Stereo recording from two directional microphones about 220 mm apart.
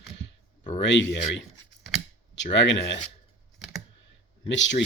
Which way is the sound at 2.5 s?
55° left (ahead or behind).